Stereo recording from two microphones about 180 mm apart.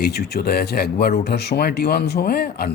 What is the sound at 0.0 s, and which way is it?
A man's voice, 65° left (ahead or behind).